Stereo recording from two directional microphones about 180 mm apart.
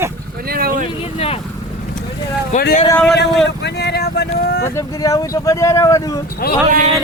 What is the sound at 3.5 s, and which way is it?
Speech, 70° left (ahead or behind).